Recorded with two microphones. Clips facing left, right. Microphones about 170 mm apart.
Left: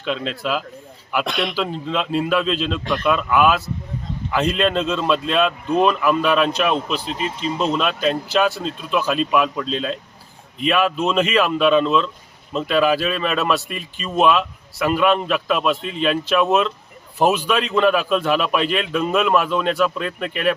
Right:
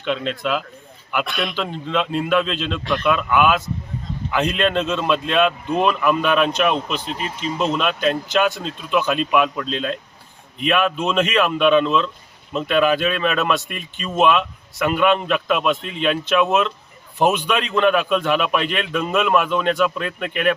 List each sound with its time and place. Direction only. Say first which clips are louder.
0.0 s speech: right 1 dB; centre (ahead or behind)
1.3 s speech: left 2 dB; 90° left
1.5 s speech: even; centre (ahead or behind)
2.8 s a man's voice: even; 15° left (ahead or behind)
3.1 s speech: left 1 dB; centre (ahead or behind)